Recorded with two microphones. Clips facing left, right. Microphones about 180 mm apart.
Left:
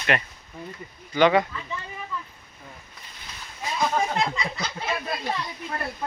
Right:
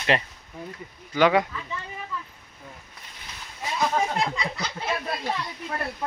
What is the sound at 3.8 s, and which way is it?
Speech, centre (ahead or behind).